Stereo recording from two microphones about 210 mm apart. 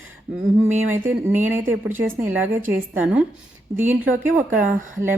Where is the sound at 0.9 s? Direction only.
10° right (ahead or behind).